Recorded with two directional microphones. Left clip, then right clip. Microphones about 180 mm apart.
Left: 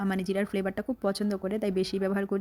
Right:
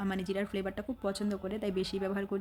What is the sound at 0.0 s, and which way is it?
Speech, 35° left (ahead or behind).